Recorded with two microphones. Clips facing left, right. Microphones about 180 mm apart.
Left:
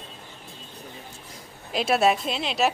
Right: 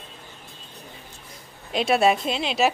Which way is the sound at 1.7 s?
Centre (ahead or behind).